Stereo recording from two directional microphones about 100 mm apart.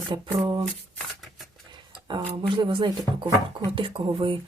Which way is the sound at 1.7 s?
50° right (ahead or behind).